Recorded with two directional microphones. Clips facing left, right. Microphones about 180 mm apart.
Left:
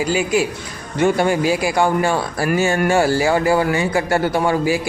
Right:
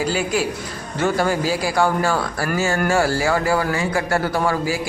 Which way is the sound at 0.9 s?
20° left (ahead or behind).